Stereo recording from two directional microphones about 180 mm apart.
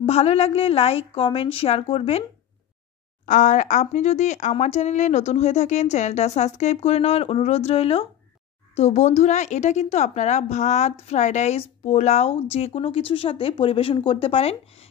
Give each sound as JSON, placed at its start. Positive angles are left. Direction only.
{"t": 0.0, "sound": "a woman's voice", "side_deg": 35}
{"t": 3.3, "sound": "a woman's voice", "side_deg": 45}